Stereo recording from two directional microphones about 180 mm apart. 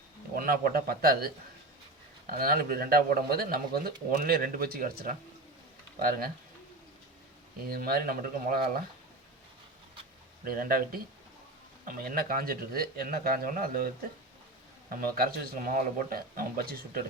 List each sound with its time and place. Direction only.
0.3 s speech: 55° right (ahead or behind)
7.7 s speech: 55° right (ahead or behind)
10.4 s speech: 55° right (ahead or behind)
14.8 s speech: 55° right (ahead or behind)